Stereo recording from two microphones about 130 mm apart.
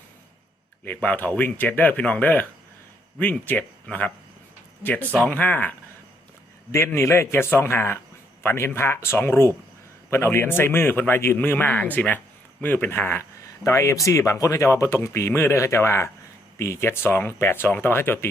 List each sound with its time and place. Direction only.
0.9 s speech: 15° left (ahead or behind)